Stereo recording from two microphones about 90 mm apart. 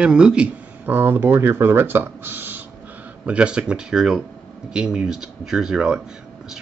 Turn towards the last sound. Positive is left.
turn(degrees=-10)  # may be behind; listen again after turning